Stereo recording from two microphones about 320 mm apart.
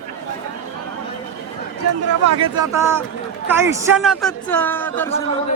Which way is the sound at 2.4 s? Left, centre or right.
Centre.